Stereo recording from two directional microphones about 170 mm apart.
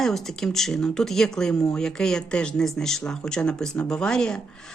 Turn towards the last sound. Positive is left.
turn(degrees=5)  # may be behind; listen again after turning